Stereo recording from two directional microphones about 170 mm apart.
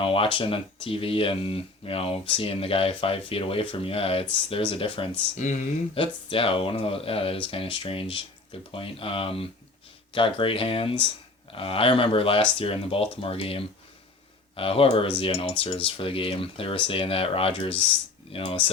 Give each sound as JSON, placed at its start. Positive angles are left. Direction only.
{"t": 0.0, "sound": "speech", "side_deg": 35}